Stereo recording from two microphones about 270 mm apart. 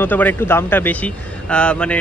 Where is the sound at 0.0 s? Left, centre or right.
Centre.